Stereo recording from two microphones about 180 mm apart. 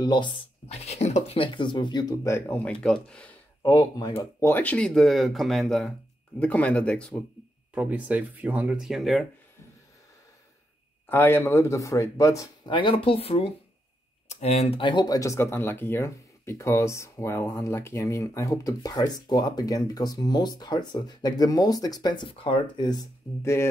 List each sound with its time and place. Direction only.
0.0 s speech: 25° left (ahead or behind); by 7.2 s 5° left (ahead or behind)
7.7 s speech: 10° right (ahead or behind)
11.1 s speech: 10° left (ahead or behind)